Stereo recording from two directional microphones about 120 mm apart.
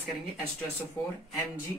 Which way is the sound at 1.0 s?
20° left (ahead or behind).